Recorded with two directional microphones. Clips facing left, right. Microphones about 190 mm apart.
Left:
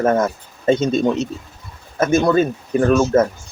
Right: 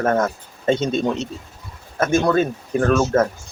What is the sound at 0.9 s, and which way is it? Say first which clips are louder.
Speech: left 4 dB; 40° left (ahead or behind).